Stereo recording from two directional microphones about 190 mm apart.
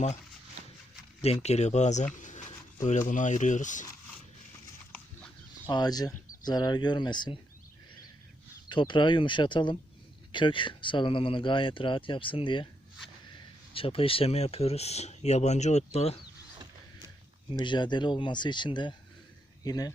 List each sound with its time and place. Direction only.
1.2 s speech: 35° left (ahead or behind)
5.6 s speech: 20° left (ahead or behind)
8.7 s speech: 25° left (ahead or behind)
13.7 s speech: 30° left (ahead or behind)
17.5 s speech: 25° left (ahead or behind)